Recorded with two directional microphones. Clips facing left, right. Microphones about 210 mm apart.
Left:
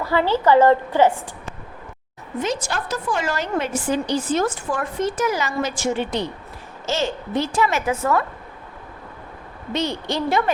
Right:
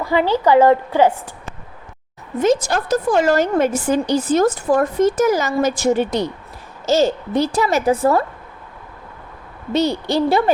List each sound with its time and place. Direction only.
0.0 s a woman's voice: 15° right (ahead or behind)
2.4 s a woman's voice: 45° right (ahead or behind)
9.7 s a woman's voice: 35° right (ahead or behind)